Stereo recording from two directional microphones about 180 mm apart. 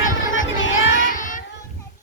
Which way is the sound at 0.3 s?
90° left.